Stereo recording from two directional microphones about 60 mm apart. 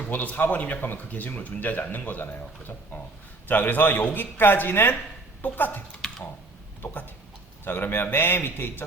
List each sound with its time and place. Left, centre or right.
0.0 s a woman's voice: left
6.8 s a woman's voice: left